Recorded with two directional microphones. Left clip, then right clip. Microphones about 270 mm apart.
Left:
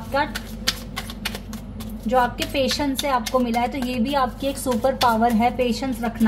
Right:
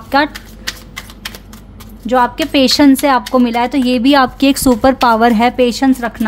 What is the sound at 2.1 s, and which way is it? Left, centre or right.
A woman's voice, right.